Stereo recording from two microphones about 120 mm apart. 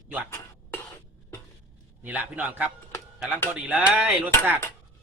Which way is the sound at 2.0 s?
15° right (ahead or behind).